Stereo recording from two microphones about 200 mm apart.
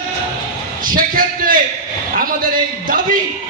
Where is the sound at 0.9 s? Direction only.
45° right (ahead or behind).